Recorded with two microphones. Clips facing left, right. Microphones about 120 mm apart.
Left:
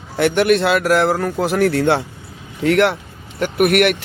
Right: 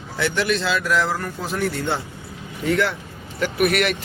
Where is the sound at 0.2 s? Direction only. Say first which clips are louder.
Left 8 dB; 55° left (ahead or behind); by 2.0 s 90° left.